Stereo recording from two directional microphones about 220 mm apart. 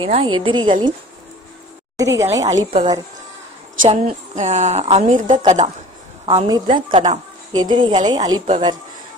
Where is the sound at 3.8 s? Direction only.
30° right (ahead or behind).